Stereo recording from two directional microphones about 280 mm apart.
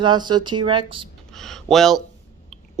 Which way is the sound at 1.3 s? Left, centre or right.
Centre.